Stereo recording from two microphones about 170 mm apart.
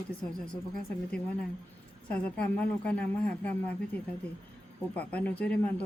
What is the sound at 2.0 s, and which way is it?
A woman's voice, 10° left (ahead or behind).